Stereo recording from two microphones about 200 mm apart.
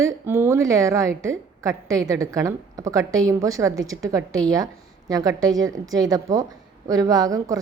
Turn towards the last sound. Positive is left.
turn(degrees=-15)  # may be behind; listen again after turning